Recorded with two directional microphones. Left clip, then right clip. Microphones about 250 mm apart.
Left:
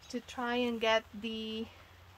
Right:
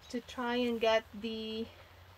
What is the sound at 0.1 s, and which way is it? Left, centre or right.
Speech, centre.